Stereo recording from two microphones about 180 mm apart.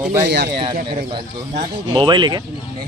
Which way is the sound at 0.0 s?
15° right (ahead or behind).